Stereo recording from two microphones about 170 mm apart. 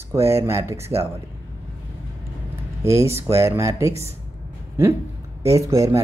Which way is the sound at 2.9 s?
15° right (ahead or behind).